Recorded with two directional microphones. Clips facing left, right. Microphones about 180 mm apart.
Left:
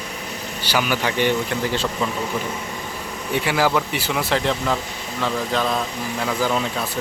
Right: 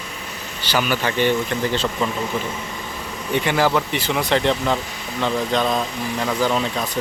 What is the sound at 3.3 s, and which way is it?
Speech, 5° left (ahead or behind).